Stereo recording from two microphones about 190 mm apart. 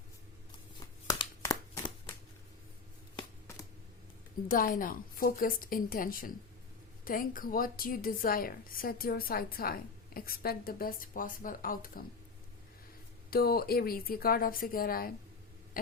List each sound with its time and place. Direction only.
0.8 s a sound: 20° left (ahead or behind)
4.4 s a woman's voice: 45° left (ahead or behind)
13.3 s a woman's voice: 55° left (ahead or behind)